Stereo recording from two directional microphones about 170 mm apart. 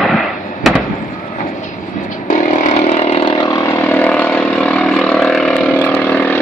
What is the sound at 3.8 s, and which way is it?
Vehicle, 10° left (ahead or behind).